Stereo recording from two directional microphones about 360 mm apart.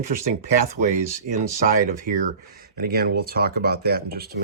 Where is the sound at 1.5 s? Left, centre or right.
Right.